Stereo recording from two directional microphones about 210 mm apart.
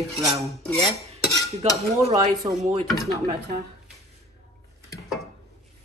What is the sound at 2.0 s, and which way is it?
Speech, 30° right (ahead or behind).